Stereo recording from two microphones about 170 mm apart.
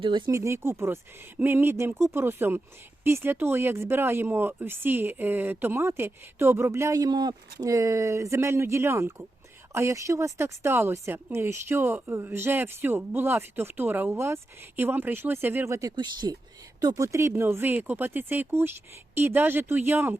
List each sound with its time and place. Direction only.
0.0 s speech: 30° right (ahead or behind)
0.3 s speech: 15° right (ahead or behind)